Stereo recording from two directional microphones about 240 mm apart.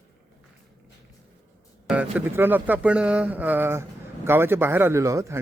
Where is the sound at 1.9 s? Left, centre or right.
Centre.